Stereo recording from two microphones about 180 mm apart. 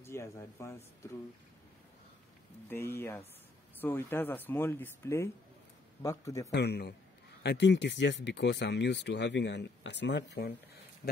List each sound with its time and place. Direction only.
0.0 s speech: 15° left (ahead or behind)
2.7 s speech: 15° left (ahead or behind)
6.5 s a man's voice: 65° left (ahead or behind)